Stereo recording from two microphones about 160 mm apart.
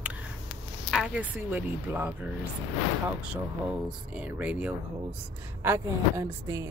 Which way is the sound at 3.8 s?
5° right (ahead or behind).